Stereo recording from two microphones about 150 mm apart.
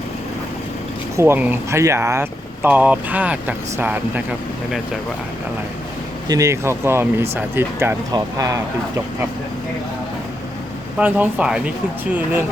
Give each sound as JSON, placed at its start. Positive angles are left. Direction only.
{"t": 1.1, "sound": "speech", "side_deg": -15}
{"t": 6.2, "sound": "speech", "side_deg": -20}
{"t": 10.9, "sound": "speech", "side_deg": -10}